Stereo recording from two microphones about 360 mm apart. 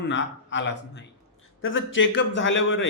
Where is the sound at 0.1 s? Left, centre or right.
Left.